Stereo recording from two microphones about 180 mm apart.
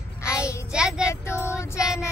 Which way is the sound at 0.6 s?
5° right (ahead or behind).